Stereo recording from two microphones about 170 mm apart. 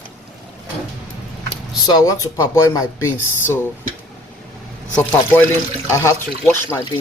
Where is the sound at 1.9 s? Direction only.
20° left (ahead or behind).